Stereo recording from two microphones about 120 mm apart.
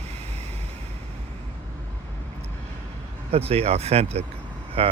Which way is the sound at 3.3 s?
55° right (ahead or behind).